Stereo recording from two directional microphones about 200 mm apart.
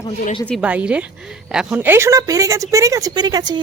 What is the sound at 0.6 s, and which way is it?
A woman's voice, 5° right (ahead or behind).